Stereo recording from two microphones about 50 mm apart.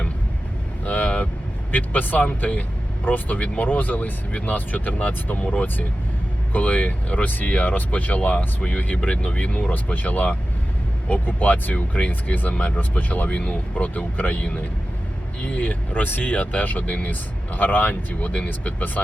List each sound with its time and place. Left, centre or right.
0.9 s vehicle: left
1.7 s speech: left
11.3 s speech: left
15.4 s speech: left